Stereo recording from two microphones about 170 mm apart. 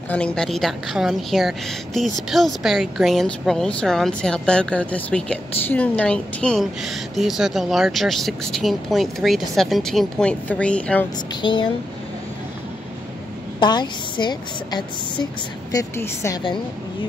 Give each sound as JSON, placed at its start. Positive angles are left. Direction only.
{"t": 0.1, "sound": "a woman's voice", "side_deg": 5}
{"t": 11.4, "sound": "a woman's voice", "side_deg": 30}
{"t": 13.6, "sound": "a woman's voice", "side_deg": 25}